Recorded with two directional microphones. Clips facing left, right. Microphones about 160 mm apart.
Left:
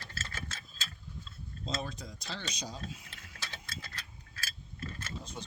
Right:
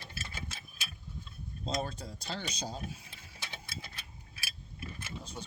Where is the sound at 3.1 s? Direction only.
15° right (ahead or behind).